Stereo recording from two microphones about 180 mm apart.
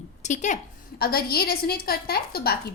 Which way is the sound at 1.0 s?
60° left (ahead or behind).